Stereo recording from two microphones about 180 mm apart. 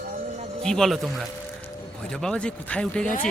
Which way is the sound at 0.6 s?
5° left (ahead or behind).